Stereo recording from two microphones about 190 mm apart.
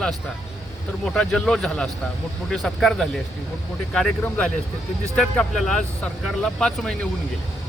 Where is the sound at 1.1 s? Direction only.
5° left (ahead or behind).